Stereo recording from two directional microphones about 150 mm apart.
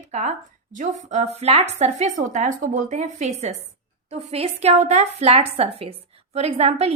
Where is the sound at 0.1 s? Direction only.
50° right (ahead or behind).